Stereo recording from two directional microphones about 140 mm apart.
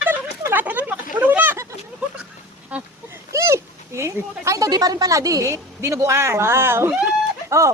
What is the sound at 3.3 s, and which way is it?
Speech, 20° right (ahead or behind).